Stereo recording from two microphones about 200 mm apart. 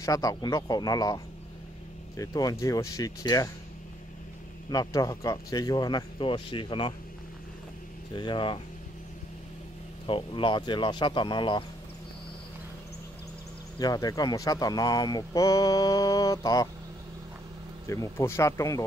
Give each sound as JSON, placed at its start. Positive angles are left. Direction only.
{"t": 0.0, "sound": "speech", "side_deg": 15}
{"t": 4.6, "sound": "speech", "side_deg": 20}
{"t": 8.1, "sound": "speech", "side_deg": 25}
{"t": 10.0, "sound": "speech", "side_deg": 25}
{"t": 13.7, "sound": "speech", "side_deg": 20}
{"t": 17.8, "sound": "speech", "side_deg": 15}